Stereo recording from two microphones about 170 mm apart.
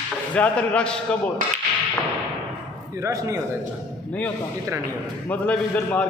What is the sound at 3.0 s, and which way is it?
Speech, 15° right (ahead or behind).